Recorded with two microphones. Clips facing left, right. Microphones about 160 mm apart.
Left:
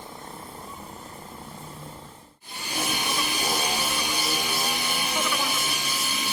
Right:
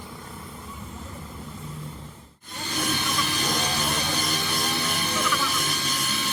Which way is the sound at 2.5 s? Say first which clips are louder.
Right 2 dB; 10° left (ahead or behind).